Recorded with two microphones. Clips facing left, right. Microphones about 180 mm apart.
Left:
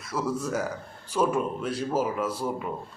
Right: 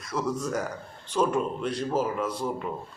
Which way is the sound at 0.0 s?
5° left (ahead or behind).